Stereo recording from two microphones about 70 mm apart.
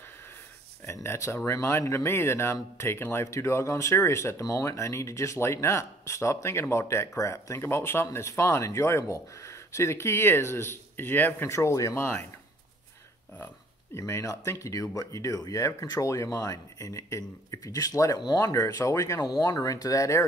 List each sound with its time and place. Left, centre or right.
1.0 s speech: left
11.4 s speech: left
13.9 s speech: left
18.1 s speech: left
18.5 s speech: left